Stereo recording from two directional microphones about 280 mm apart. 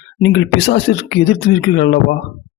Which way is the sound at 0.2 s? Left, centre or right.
Left.